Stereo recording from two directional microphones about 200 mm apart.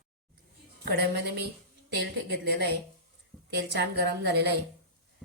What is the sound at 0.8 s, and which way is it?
A woman's voice, 55° right (ahead or behind).